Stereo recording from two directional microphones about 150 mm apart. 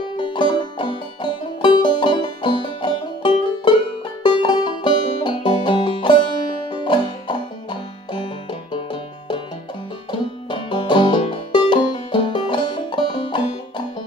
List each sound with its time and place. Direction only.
0.2 s music: 30° left (ahead or behind)
4.2 s banjo: 30° left (ahead or behind)
6.7 s music: 30° left (ahead or behind)
10.5 s banjo: 30° left (ahead or behind)